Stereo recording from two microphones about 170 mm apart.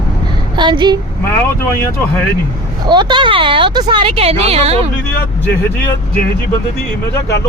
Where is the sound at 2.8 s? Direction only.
25° right (ahead or behind).